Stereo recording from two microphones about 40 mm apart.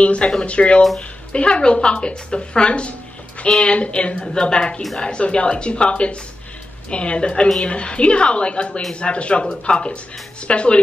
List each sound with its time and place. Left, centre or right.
0.0 s a woman's voice: left